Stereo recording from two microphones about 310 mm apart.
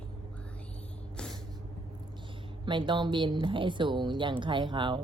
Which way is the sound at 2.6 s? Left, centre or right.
Centre.